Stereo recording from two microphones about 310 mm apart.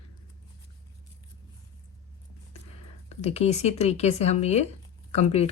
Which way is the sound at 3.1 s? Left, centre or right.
Left.